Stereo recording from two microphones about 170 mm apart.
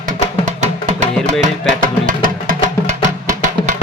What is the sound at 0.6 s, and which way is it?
Music, 40° right (ahead or behind).